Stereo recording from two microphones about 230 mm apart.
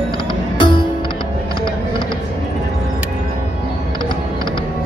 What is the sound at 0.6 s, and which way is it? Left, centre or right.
Music, centre.